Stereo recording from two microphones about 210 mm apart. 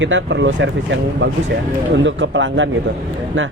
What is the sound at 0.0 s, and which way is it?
Mantra, 60° right (ahead or behind).